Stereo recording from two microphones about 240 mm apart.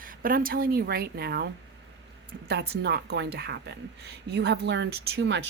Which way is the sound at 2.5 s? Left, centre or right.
Right.